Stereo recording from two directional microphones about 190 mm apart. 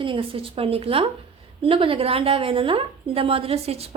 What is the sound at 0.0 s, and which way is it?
A woman's voice, 30° right (ahead or behind).